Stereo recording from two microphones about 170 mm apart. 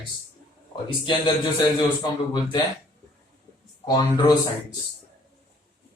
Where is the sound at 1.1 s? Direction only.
25° left (ahead or behind).